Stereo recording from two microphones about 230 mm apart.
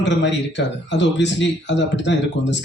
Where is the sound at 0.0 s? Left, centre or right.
Left.